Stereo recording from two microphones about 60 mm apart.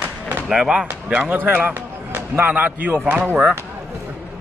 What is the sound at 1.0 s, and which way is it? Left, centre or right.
Speech, right.